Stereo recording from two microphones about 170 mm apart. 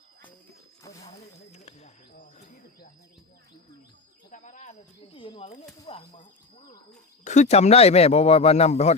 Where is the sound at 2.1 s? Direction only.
50° left (ahead or behind).